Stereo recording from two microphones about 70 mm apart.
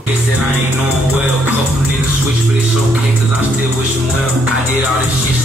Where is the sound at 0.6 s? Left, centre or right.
Right.